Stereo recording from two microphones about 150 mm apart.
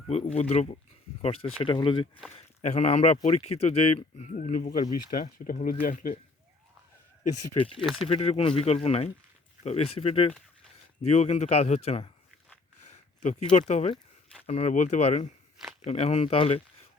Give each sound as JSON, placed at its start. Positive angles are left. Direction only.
{"t": 0.3, "sound": "speech", "side_deg": 45}
{"t": 2.6, "sound": "speech", "side_deg": 45}
{"t": 7.3, "sound": "speech", "side_deg": 50}
{"t": 7.8, "sound": "speech", "side_deg": 0}
{"t": 8.0, "sound": "speech", "side_deg": 40}